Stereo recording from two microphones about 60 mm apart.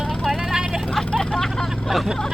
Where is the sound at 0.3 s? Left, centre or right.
Centre.